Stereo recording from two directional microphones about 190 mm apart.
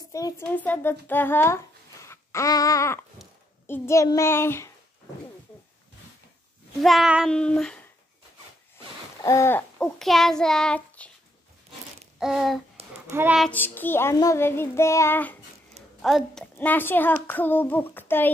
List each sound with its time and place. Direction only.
0.1 s child singing: 15° left (ahead or behind)
2.0 s a sound: 15° left (ahead or behind)
3.6 s child singing: 15° left (ahead or behind)
6.8 s child singing: centre (ahead or behind)
9.2 s child singing: 15° left (ahead or behind)
12.2 s child singing: centre (ahead or behind)
12.8 s a sound: 35° right (ahead or behind)
13.1 s a child's voice: 10° right (ahead or behind)
13.4 s child singing: 10° left (ahead or behind)
16.0 s child singing: centre (ahead or behind)